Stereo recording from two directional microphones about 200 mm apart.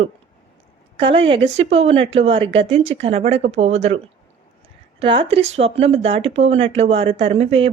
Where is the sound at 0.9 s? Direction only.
25° right (ahead or behind).